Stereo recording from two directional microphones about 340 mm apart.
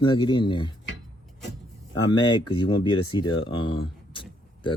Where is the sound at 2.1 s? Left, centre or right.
Centre.